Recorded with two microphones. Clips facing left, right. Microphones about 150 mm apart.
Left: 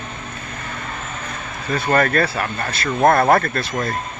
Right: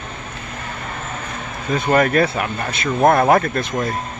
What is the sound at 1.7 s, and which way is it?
Speech, 10° right (ahead or behind).